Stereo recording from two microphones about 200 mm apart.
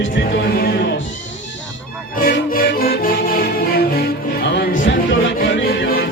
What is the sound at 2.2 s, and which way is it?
Music, 50° left (ahead or behind).